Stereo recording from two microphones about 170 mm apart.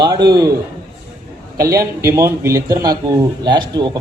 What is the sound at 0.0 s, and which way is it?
Speech, 25° right (ahead or behind).